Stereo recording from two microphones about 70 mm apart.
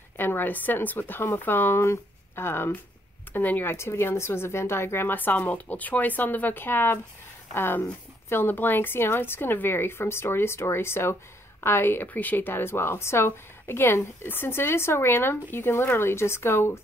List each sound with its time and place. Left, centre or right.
0.2 s a woman's voice: left
3.7 s a woman's voice: left